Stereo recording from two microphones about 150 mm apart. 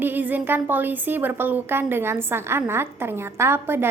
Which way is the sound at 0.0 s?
10° right (ahead or behind).